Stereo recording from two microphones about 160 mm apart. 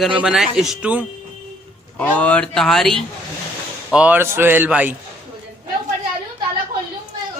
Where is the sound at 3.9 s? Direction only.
10° right (ahead or behind).